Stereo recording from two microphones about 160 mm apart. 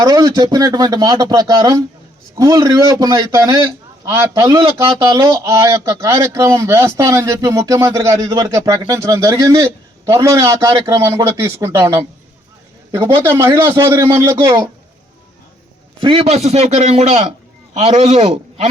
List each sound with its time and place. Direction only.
0.0 s speech: 25° right (ahead or behind)
16.0 s a man's voice: 30° right (ahead or behind)
16.2 s a man's voice: 40° right (ahead or behind)